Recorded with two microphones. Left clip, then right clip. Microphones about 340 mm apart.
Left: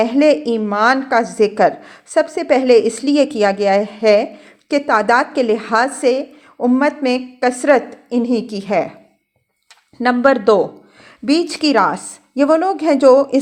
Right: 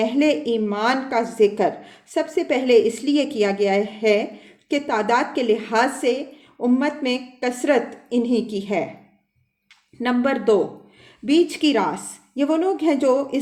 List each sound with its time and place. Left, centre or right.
0.0 s a woman's voice: left
10.0 s a woman's voice: left